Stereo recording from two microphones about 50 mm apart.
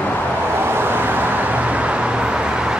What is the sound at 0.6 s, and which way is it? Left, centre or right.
Vehicle, right.